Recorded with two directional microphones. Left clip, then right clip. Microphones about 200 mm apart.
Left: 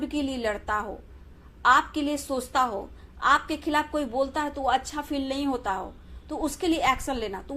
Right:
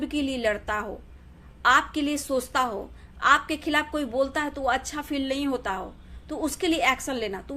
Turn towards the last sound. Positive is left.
turn(degrees=-20)  # may be behind; listen again after turning